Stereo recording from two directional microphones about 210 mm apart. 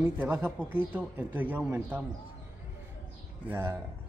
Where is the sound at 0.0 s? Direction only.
10° right (ahead or behind).